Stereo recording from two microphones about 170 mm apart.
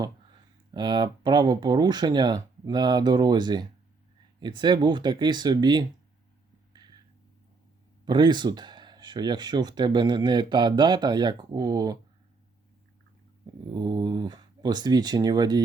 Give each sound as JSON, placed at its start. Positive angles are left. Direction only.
{"t": 0.7, "sound": "speech", "side_deg": -25}
{"t": 8.0, "sound": "speech", "side_deg": -25}
{"t": 13.7, "sound": "speech", "side_deg": -25}